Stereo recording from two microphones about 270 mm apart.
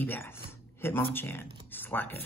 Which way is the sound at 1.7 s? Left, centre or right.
Centre.